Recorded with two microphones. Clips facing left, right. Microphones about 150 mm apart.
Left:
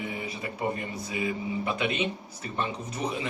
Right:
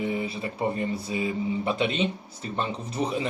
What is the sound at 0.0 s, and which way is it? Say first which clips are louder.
Speech: right 6 dB; 30° right (ahead or behind).